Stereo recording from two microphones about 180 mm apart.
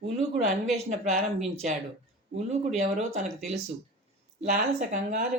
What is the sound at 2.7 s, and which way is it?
Speech, 40° right (ahead or behind).